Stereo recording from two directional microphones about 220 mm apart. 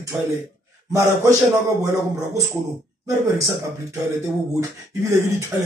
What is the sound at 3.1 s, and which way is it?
Speech, 15° right (ahead or behind).